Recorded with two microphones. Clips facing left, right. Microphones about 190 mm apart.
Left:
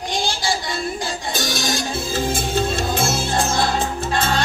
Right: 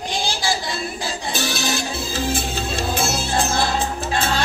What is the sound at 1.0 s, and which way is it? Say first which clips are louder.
Music: even; 50° left (ahead or behind).